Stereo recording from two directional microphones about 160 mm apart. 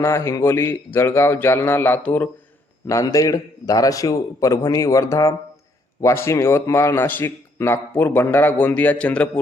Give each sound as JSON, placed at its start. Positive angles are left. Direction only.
{"t": 0.0, "sound": "a man's voice", "side_deg": 15}